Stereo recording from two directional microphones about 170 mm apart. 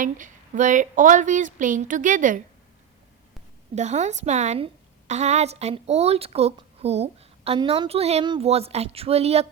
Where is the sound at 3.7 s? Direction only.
40° right (ahead or behind).